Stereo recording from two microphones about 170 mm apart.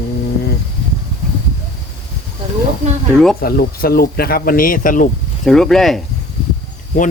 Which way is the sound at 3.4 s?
60° left (ahead or behind).